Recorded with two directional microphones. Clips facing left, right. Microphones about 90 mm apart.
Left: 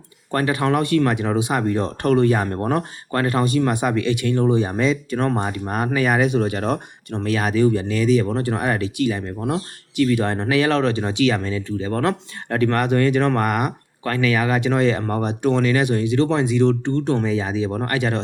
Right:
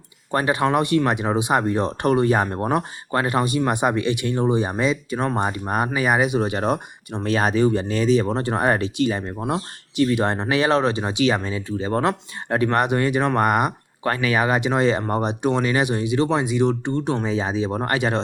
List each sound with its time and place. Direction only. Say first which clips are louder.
0.3 s speech: even; 20° right (ahead or behind)
7.3 s speech: even; 30° right (ahead or behind); by 17.2 s 15° right (ahead or behind)
17.2 s speech: left 1 dB; 25° right (ahead or behind)